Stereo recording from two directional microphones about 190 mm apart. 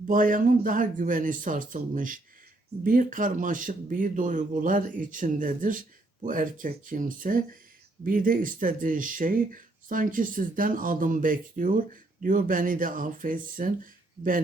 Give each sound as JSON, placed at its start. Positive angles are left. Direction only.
{"t": 0.1, "sound": "speech", "side_deg": -45}